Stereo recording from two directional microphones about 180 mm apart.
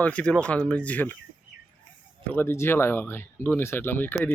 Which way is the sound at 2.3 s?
15° left (ahead or behind).